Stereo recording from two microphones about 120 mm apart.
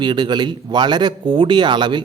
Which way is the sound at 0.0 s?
40° right (ahead or behind).